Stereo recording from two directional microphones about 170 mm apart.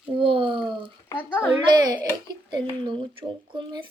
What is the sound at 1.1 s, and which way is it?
Speech, 15° left (ahead or behind).